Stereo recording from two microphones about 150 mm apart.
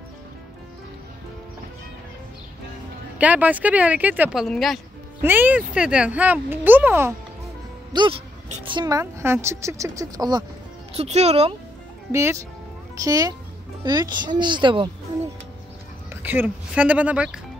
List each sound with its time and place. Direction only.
3.2 s speech: 10° right (ahead or behind)
5.2 s speech: 10° right (ahead or behind)
7.9 s speech: 30° right (ahead or behind)
11.0 s speech: 45° right (ahead or behind)
12.1 s speech: 20° right (ahead or behind)
16.2 s speech: 10° right (ahead or behind)